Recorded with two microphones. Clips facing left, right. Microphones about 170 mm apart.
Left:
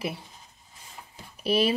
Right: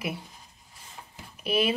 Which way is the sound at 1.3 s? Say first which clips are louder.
Left 2 dB; 35° left (ahead or behind).